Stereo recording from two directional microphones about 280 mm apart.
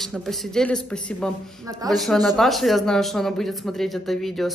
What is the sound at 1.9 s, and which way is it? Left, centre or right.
A woman's voice, centre.